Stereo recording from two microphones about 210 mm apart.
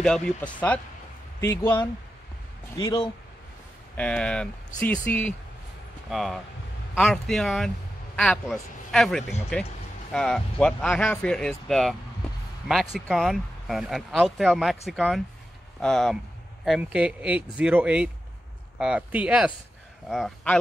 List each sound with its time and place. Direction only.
0.0 s speech: 5° left (ahead or behind)
3.9 s speech: 5° left (ahead or behind)